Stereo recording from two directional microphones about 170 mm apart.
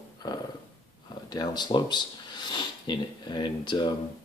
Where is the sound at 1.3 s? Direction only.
25° left (ahead or behind).